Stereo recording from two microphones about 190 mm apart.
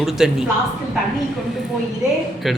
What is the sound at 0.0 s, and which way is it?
Speech, centre (ahead or behind).